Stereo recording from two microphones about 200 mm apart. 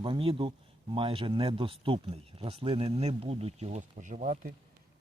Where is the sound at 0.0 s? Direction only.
25° right (ahead or behind).